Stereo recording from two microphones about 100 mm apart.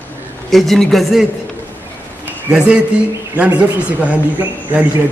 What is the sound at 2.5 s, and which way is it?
A man's voice, 15° right (ahead or behind).